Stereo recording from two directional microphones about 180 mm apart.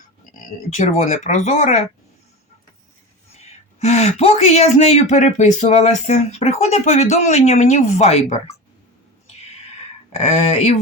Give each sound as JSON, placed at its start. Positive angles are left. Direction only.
{"t": 0.7, "sound": "speech", "side_deg": 40}
{"t": 3.3, "sound": "speech", "side_deg": 35}
{"t": 10.1, "sound": "speech", "side_deg": 40}